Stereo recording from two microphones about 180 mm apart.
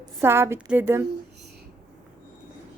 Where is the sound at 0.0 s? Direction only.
15° right (ahead or behind).